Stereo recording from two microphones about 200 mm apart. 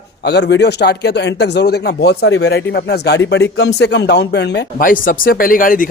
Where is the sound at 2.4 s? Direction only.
55° left (ahead or behind).